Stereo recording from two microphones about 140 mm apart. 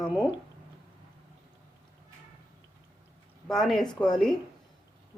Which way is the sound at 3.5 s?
Centre (ahead or behind).